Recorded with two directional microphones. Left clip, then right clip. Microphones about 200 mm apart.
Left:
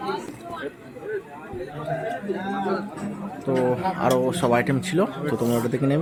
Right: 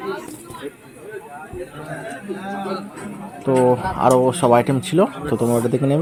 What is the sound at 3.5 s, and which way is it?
A man's voice, 15° right (ahead or behind).